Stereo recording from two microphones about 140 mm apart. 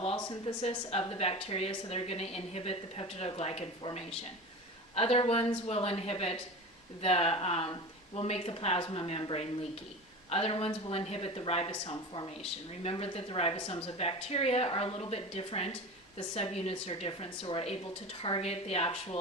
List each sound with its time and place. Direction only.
0.0 s speech: 40° left (ahead or behind)
4.9 s speech: 45° left (ahead or behind)